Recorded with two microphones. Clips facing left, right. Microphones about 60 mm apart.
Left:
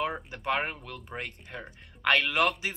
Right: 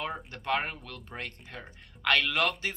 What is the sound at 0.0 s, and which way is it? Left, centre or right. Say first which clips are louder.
A man's voice: left 4 dB; centre.